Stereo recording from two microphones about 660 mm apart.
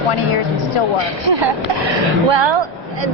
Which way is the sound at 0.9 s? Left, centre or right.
Right.